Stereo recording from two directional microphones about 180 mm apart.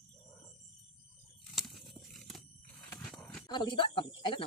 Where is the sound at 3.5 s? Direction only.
25° left (ahead or behind).